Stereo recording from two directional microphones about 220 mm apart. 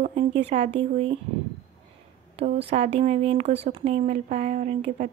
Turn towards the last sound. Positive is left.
turn(degrees=-30)  # may be behind; listen again after turning